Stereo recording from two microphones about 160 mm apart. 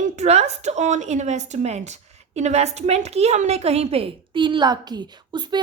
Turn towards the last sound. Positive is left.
turn(degrees=-25)  # may be behind; listen again after turning